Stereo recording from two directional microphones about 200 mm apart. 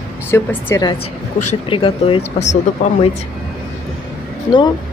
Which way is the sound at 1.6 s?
25° left (ahead or behind).